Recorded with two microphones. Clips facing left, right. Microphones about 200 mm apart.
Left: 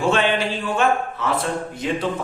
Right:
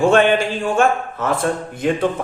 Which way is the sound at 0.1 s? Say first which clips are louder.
Right 5 dB; 50° right (ahead or behind).